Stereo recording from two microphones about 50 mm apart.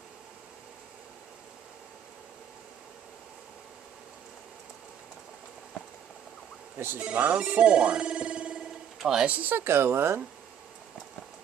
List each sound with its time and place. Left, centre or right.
7.0 s speech: right
8.9 s a sound: centre
9.2 s speech: right
9.7 s speech: right